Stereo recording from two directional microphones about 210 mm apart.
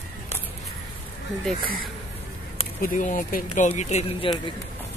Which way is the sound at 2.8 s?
40° left (ahead or behind).